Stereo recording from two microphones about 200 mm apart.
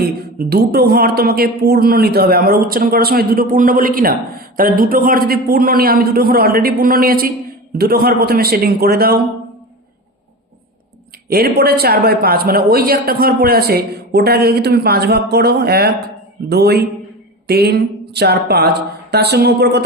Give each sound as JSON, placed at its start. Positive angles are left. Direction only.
{"t": 0.0, "sound": "speech", "side_deg": -50}
{"t": 11.3, "sound": "speech", "side_deg": -50}